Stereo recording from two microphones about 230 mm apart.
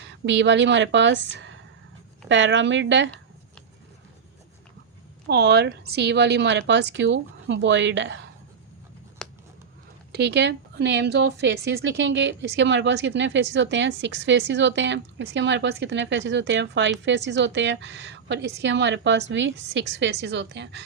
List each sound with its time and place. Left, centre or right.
0.0 s a woman's voice: right
5.3 s a woman's voice: right
9.2 s a sound: centre
10.1 s a woman's voice: right